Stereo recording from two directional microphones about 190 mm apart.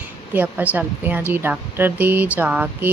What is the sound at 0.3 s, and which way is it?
Speech, 10° right (ahead or behind).